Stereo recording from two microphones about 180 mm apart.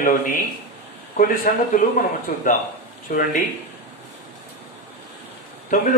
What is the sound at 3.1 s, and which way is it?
Speech, 50° left (ahead or behind).